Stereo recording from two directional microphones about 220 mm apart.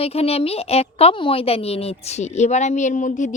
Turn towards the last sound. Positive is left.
turn(degrees=35)  # may be behind; listen again after turning